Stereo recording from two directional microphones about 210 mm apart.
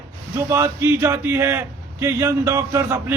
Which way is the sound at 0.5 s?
10° right (ahead or behind).